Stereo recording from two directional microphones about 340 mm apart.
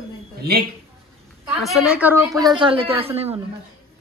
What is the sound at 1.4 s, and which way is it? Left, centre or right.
A woman's voice, centre.